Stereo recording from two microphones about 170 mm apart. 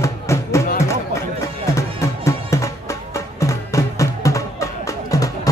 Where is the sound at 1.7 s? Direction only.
20° left (ahead or behind).